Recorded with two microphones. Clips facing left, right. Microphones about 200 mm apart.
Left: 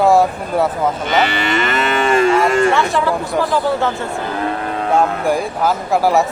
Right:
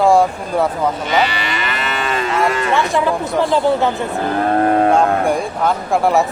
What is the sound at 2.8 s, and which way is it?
Speech, 20° right (ahead or behind).